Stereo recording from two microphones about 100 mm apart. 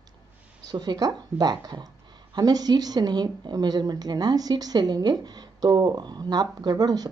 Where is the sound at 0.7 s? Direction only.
40° right (ahead or behind).